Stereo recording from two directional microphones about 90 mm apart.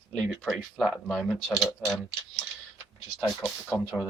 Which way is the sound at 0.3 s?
Centre (ahead or behind).